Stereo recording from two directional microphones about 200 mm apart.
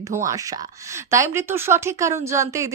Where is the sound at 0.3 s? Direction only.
15° right (ahead or behind).